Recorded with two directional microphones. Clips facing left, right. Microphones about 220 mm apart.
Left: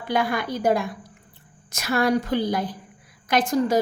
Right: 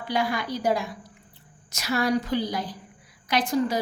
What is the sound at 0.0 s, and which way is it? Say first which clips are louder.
A woman's voice: left 3 dB; 55° left (ahead or behind).